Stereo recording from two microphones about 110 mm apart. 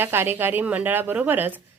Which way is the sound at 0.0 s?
20° right (ahead or behind).